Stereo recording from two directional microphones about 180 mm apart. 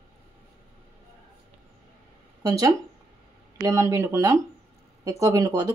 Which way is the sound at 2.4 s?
20° right (ahead or behind).